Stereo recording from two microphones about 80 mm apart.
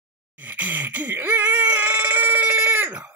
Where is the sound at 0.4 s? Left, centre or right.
Right.